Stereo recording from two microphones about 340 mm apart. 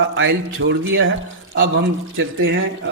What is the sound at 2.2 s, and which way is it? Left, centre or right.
Speech, right.